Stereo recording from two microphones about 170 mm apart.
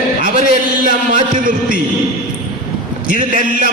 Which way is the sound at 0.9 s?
50° right (ahead or behind).